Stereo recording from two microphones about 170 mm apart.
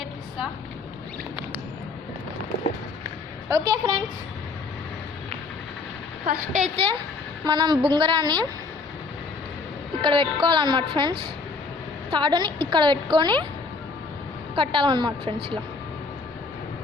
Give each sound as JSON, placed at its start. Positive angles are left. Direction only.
{"t": 3.5, "sound": "a woman's voice", "side_deg": -20}
{"t": 6.2, "sound": "a woman's voice", "side_deg": -50}
{"t": 7.4, "sound": "a woman's voice", "side_deg": -25}
{"t": 10.0, "sound": "a woman's voice", "side_deg": -30}
{"t": 14.5, "sound": "a woman's voice", "side_deg": -30}